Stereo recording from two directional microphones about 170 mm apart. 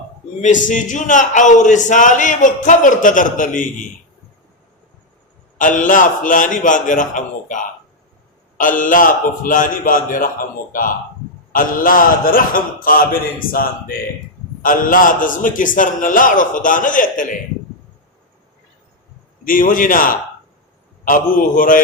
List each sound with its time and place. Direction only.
0.4 s speech: 45° left (ahead or behind)
5.5 s a man's voice: 50° left (ahead or behind)
19.5 s speech: 55° left (ahead or behind)